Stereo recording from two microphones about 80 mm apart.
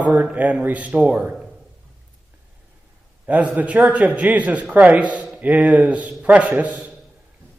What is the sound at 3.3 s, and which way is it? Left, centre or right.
A man's voice, centre.